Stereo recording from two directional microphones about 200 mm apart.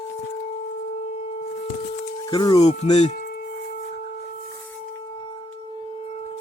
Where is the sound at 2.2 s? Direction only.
20° left (ahead or behind).